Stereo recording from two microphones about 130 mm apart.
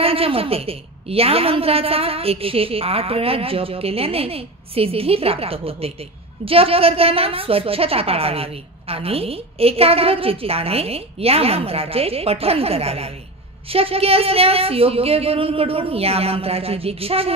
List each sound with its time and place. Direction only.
0.0 s a woman's voice: 45° right (ahead or behind)